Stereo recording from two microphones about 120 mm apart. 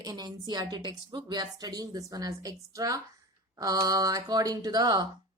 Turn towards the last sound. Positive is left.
turn(degrees=-35)  # may be behind; listen again after turning